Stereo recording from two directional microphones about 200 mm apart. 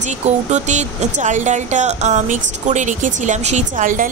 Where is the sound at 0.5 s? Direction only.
35° right (ahead or behind).